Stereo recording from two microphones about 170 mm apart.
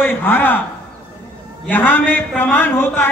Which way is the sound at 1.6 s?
10° left (ahead or behind).